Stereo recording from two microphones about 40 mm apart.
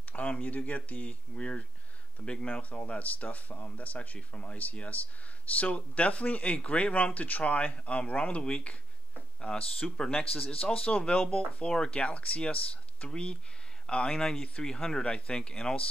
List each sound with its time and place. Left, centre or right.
0.1 s speech: left
10.9 s speech: left